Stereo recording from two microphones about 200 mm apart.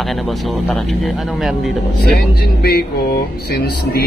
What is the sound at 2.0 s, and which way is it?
Speech, 50° left (ahead or behind).